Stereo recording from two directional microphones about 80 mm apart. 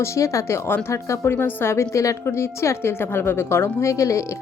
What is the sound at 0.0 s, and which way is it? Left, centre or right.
A woman's voice, left.